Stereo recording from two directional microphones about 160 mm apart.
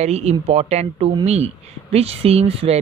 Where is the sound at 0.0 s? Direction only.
40° right (ahead or behind).